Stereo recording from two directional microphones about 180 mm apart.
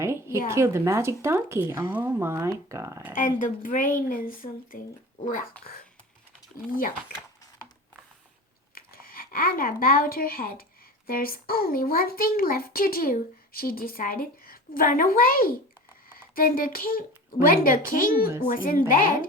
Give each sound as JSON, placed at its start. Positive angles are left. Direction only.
{"t": 0.0, "sound": "speech", "side_deg": -15}
{"t": 3.2, "sound": "speech", "side_deg": 45}
{"t": 8.7, "sound": "a child's voice", "side_deg": 55}